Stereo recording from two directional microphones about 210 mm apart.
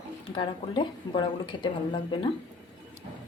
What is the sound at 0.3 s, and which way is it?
A woman's voice, 20° left (ahead or behind).